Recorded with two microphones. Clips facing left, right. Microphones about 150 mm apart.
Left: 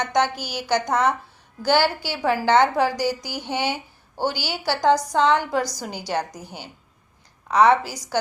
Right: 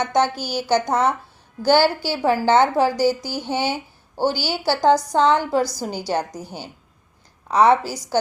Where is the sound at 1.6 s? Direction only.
35° right (ahead or behind).